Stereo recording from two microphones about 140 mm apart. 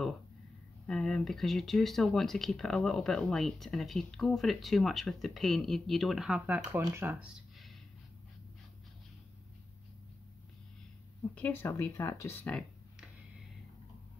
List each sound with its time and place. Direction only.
0.8 s speech: 5° left (ahead or behind); by 7.2 s 15° right (ahead or behind)
11.3 s speech: 10° left (ahead or behind)